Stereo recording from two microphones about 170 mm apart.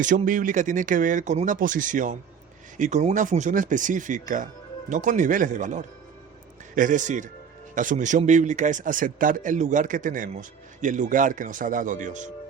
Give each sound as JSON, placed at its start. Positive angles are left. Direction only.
{"t": 0.3, "sound": "speech", "side_deg": -50}